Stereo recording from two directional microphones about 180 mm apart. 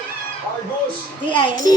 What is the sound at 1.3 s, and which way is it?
Speech, 25° left (ahead or behind).